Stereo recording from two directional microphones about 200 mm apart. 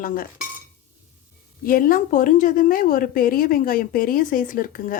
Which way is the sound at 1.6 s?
45° left (ahead or behind).